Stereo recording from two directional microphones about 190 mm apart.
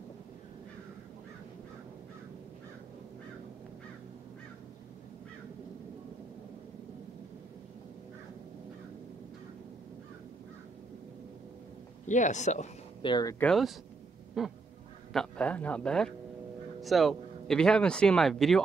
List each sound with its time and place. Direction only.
12.1 s speech: 40° left (ahead or behind)
13.0 s speech: 20° left (ahead or behind)
13.4 s speech: centre (ahead or behind)
14.4 s quack: centre (ahead or behind)
15.1 s speech: 5° left (ahead or behind)